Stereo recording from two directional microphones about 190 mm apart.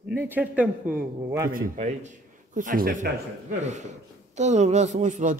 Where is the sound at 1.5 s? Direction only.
45° right (ahead or behind).